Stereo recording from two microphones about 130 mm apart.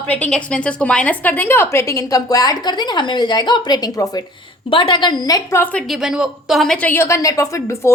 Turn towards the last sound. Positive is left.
turn(degrees=25)  # may be behind; listen again after turning